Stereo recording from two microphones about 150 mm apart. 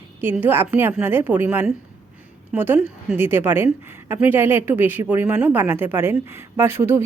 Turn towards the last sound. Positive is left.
turn(degrees=-15)  # may be behind; listen again after turning